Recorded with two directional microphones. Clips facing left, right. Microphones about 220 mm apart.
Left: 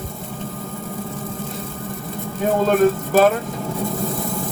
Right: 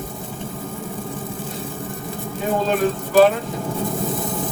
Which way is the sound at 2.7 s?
45° left (ahead or behind).